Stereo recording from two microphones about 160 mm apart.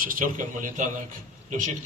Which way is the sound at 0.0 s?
60° right (ahead or behind).